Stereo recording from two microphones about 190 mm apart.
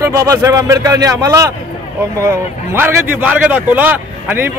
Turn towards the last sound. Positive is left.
turn(degrees=-10)  # may be behind; listen again after turning